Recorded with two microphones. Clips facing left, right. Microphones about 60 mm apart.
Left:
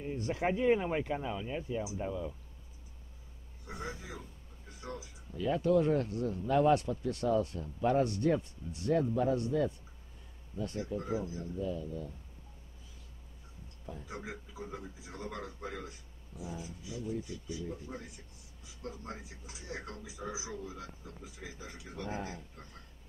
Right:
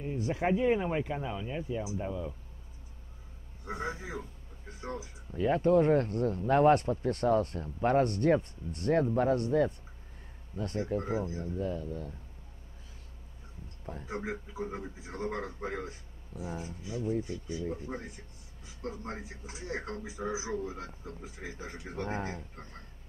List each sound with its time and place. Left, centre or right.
0.2 s speech: centre
3.6 s a man's voice: right
13.8 s speech: right